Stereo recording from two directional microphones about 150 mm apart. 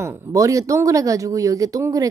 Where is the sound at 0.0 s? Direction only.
15° right (ahead or behind).